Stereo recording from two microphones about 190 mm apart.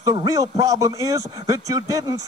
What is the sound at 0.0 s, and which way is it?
Speech, 20° right (ahead or behind).